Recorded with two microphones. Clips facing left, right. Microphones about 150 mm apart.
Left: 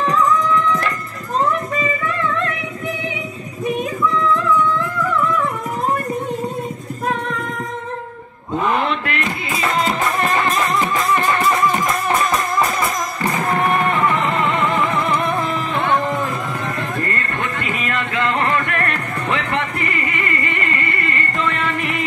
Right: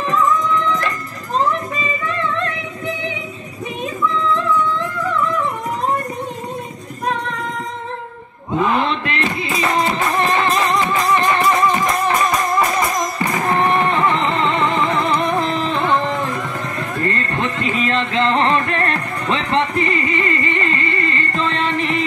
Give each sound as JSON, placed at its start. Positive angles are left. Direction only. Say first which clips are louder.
{"t": 8.8, "sound": "a sound", "louder": "right 1 dB", "side_deg": -20}
{"t": 10.7, "sound": "music", "louder": "right 1 dB", "side_deg": -20}
{"t": 13.8, "sound": "music", "louder": "right 1 dB", "side_deg": -20}
{"t": 17.0, "sound": "music", "louder": "right 3 dB", "side_deg": -25}